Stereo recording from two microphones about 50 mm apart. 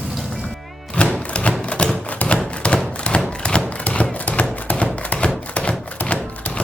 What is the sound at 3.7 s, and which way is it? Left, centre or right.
Typewriter, left.